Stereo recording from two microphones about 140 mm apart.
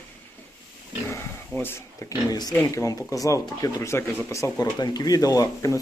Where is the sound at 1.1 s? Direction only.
15° left (ahead or behind).